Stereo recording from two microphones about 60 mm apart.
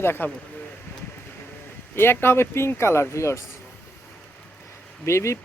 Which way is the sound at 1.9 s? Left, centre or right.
Left.